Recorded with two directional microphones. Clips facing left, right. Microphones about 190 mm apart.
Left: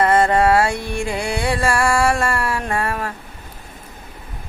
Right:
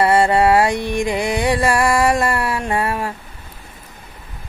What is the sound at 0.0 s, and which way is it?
Music, 10° right (ahead or behind).